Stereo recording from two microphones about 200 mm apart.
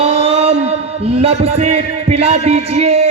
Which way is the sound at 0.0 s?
30° right (ahead or behind).